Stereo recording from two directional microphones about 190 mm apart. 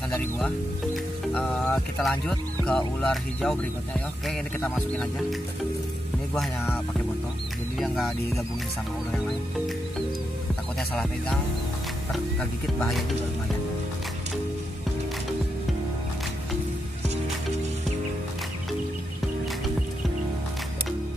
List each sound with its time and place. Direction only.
0.9 s music: 5° left (ahead or behind)
3.0 s speech: 5° left (ahead or behind)
7.8 s speech: centre (ahead or behind)
10.5 s music: 5° left (ahead or behind)
12.1 s speech: 5° left (ahead or behind)